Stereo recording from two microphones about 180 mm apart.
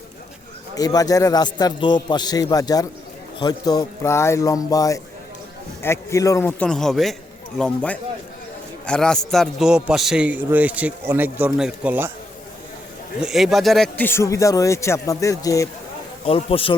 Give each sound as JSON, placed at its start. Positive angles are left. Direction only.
{"t": 0.8, "sound": "a man's voice", "side_deg": 20}
{"t": 13.2, "sound": "speech", "side_deg": 0}
{"t": 16.2, "sound": "speech", "side_deg": 30}